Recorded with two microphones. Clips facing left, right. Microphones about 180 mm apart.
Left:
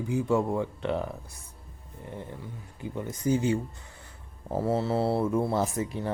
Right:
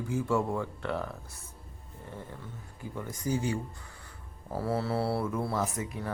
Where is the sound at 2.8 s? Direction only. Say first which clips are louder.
Left 5 dB; 20° left (ahead or behind).